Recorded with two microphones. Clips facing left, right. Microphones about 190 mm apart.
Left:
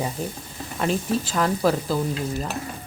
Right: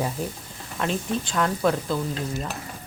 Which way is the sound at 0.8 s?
5° left (ahead or behind).